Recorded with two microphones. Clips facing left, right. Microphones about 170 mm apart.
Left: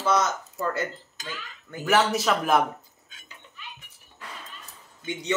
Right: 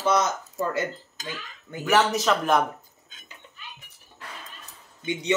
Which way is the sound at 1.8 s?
5° left (ahead or behind).